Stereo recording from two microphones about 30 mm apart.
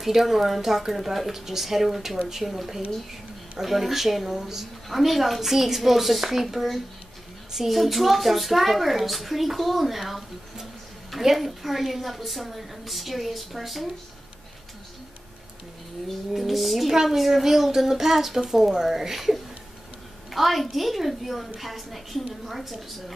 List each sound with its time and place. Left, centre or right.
0.0 s speech: centre
2.1 s speech: centre
2.4 s a woman's voice: centre
4.8 s a woman's voice: centre
11.2 s a woman's voice: centre
16.3 s a woman's voice: centre